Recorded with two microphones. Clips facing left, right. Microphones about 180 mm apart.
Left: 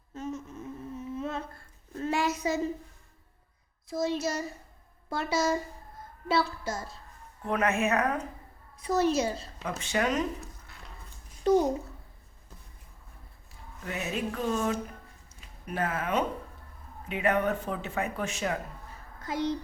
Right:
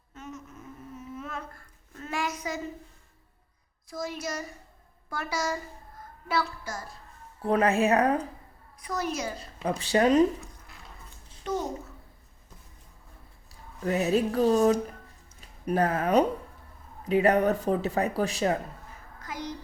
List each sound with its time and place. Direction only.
0.1 s humming: 30° left (ahead or behind)
3.8 s a woman's voice: 25° left (ahead or behind)
7.4 s speech: 35° right (ahead or behind)
8.8 s a woman's voice: 25° left (ahead or behind)
9.6 s speech: 35° right (ahead or behind)
11.5 s a child's voice: 35° left (ahead or behind)
13.5 s speech: 35° right (ahead or behind)
19.2 s a woman's voice: 30° left (ahead or behind)